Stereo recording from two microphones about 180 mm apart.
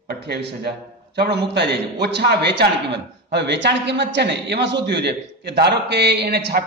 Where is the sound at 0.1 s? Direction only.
65° right (ahead or behind).